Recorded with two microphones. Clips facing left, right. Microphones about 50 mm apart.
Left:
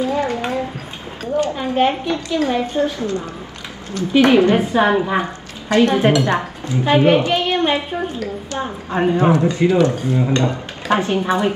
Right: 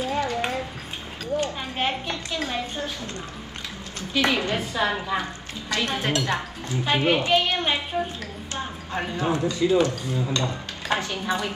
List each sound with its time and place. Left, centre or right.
0.0 s a sound: left
1.3 s a woman's voice: left
2.3 s a woman's voice: left
4.1 s a woman's voice: left
8.5 s a woman's voice: left